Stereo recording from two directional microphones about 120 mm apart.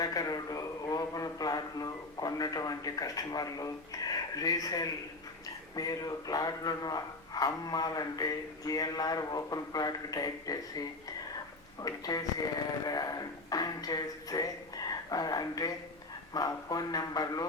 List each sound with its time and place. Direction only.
0.0 s a man's voice: 30° left (ahead or behind)